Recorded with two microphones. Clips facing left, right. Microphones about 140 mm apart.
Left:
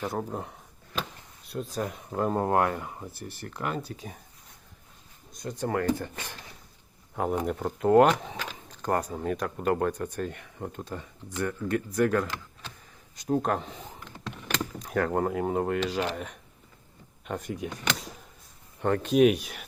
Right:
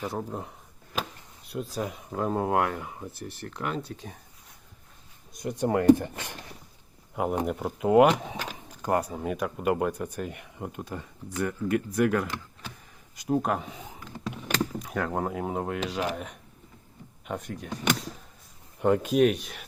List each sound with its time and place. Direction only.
0.0 s speech: centre (ahead or behind)
5.4 s speech: 20° right (ahead or behind)
7.4 s speech: 5° right (ahead or behind)
13.2 s power windows: 5° right (ahead or behind)
14.8 s speech: centre (ahead or behind)
18.8 s speech: 10° right (ahead or behind)